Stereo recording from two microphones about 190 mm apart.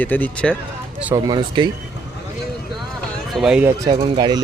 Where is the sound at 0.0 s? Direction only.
10° left (ahead or behind).